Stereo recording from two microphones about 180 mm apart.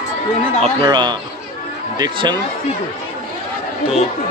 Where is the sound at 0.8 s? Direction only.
25° right (ahead or behind).